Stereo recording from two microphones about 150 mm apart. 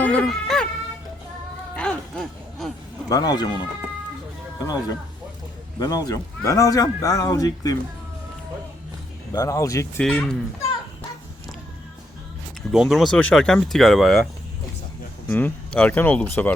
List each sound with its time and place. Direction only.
0.0 s music: 10° left (ahead or behind)
1.7 s a sound: 5° left (ahead or behind)
3.1 s a man's voice: 25° left (ahead or behind)
4.6 s a man's voice: 25° left (ahead or behind)
9.3 s a man's voice: 20° left (ahead or behind)
10.0 s speech: 5° left (ahead or behind)
12.7 s speech: 5° right (ahead or behind)
15.3 s speech: 10° left (ahead or behind)